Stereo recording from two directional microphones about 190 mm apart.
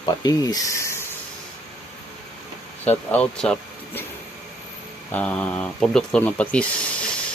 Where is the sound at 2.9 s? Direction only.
5° left (ahead or behind).